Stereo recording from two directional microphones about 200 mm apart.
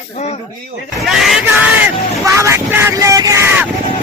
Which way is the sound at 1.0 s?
Centre (ahead or behind).